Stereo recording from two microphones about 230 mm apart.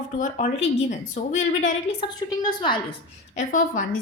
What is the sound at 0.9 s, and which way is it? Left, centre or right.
A woman's voice, left.